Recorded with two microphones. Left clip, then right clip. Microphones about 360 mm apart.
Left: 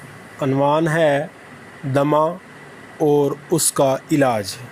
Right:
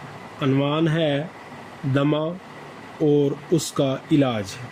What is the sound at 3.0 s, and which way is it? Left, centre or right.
Speech, left.